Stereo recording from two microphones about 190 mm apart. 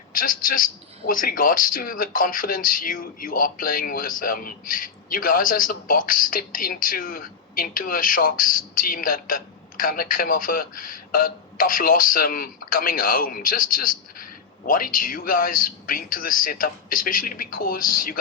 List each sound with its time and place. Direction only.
0.1 s a man's voice: 45° left (ahead or behind)